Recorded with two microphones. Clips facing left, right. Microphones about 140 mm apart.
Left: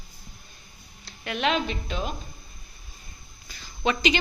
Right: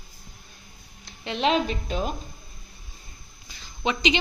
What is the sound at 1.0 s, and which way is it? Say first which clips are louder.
Speech: right 2 dB; 25° right (ahead or behind).